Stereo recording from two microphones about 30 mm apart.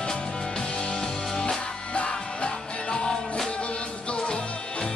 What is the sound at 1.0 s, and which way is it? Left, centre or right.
Music, centre.